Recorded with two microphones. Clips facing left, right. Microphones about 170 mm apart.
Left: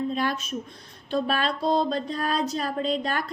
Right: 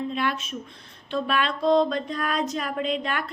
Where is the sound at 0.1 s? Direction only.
40° left (ahead or behind).